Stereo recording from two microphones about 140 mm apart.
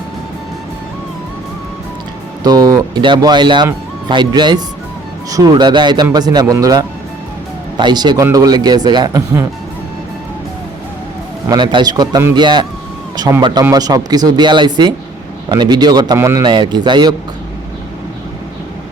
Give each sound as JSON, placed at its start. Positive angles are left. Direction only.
{"t": 2.4, "sound": "a man's voice", "side_deg": -25}
{"t": 11.4, "sound": "a man's voice", "side_deg": -30}
{"t": 16.4, "sound": "a man's voice", "side_deg": -35}